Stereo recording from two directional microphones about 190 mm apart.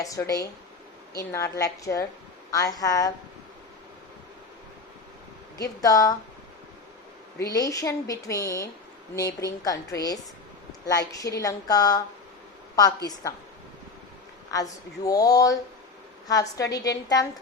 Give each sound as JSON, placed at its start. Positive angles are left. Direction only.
{"t": 0.0, "sound": "speech", "side_deg": 15}
{"t": 5.5, "sound": "a woman's voice", "side_deg": 20}
{"t": 7.3, "sound": "a woman's voice", "side_deg": 20}
{"t": 14.5, "sound": "a woman's voice", "side_deg": 20}